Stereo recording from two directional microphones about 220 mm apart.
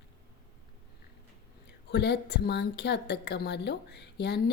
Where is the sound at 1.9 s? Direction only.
50° left (ahead or behind).